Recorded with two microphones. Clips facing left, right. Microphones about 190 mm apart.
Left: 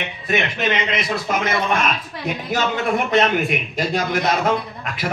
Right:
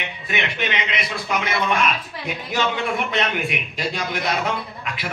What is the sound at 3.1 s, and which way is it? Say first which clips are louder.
A man's voice: left 6 dB; 45° left (ahead or behind).